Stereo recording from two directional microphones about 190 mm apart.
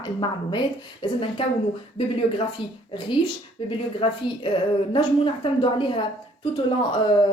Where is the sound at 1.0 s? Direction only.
30° left (ahead or behind).